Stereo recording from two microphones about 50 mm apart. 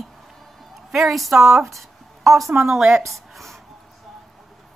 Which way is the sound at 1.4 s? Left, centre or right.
Right.